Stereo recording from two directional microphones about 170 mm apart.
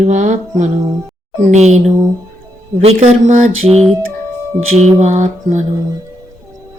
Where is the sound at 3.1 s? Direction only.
35° right (ahead or behind).